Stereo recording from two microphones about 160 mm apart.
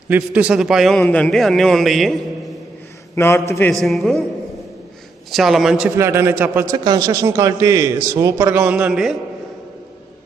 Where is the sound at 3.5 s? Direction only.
15° left (ahead or behind).